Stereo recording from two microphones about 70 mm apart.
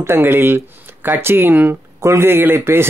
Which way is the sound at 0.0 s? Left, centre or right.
Right.